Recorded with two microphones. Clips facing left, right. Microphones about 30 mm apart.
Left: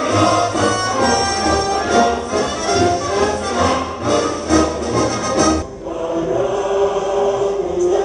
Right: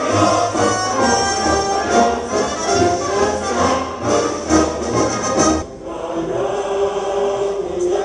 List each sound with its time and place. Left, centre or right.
0.1 s music: left
6.3 s choir: centre